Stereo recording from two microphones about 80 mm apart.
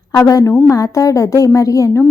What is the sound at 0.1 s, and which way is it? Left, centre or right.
A woman's voice, left.